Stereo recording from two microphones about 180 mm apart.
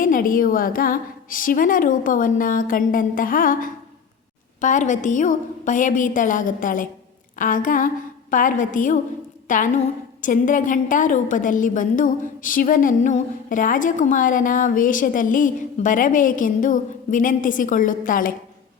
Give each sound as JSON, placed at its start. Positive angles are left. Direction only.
{"t": 0.0, "sound": "a woman's voice", "side_deg": 50}